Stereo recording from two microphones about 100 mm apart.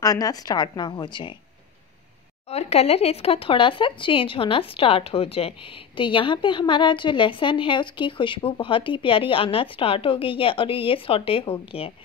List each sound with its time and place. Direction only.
0.0 s a woman's voice: 40° left (ahead or behind)
2.5 s speech: 90° left; by 5.5 s 70° left (ahead or behind)
5.9 s a woman's voice: 55° left (ahead or behind); by 11.9 s 75° left (ahead or behind)